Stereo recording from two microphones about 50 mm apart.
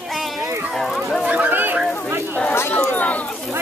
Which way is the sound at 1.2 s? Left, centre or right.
Right.